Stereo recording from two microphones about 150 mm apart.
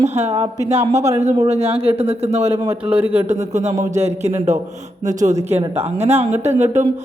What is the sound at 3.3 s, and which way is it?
Mantra, 50° right (ahead or behind).